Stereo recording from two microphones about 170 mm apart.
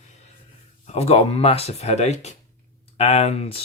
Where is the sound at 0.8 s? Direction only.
40° left (ahead or behind).